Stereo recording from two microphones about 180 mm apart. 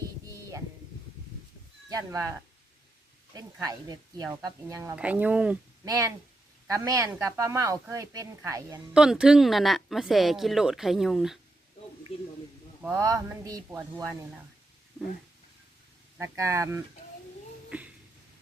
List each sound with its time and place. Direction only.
1.9 s speech: 20° right (ahead or behind)
5.8 s speech: 20° right (ahead or behind)
8.9 s speech: 5° right (ahead or behind)
13.0 s speech: 20° right (ahead or behind)
16.1 s speech: 15° right (ahead or behind)
17.7 s a sound: 5° right (ahead or behind)